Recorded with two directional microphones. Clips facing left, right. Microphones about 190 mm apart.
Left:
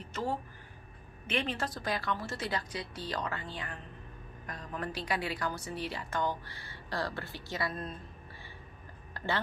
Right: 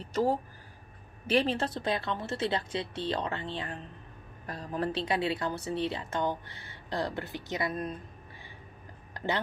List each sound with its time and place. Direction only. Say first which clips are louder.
0.0 s a woman's voice: right 7 dB; 35° right (ahead or behind); by 7.9 s 20° right (ahead or behind)
9.1 s music: right 2 dB; 20° right (ahead or behind)